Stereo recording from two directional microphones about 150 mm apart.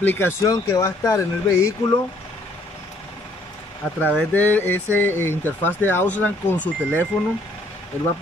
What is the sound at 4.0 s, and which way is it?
Speech, 10° left (ahead or behind).